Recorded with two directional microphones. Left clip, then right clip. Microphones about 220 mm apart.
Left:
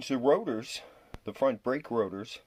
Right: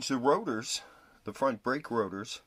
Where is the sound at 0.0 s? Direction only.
20° right (ahead or behind).